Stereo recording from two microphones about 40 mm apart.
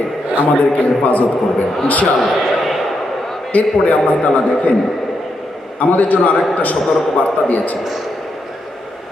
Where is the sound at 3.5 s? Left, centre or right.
Left.